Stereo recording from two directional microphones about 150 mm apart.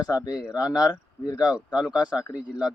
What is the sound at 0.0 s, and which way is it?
Speech, 25° left (ahead or behind).